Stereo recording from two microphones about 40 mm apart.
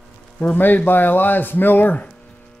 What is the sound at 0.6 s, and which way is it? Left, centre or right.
Speech, left.